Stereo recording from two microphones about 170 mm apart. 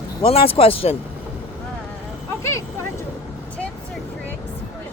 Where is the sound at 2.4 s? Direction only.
15° left (ahead or behind).